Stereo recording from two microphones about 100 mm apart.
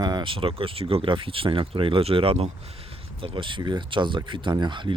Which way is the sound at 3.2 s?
60° right (ahead or behind).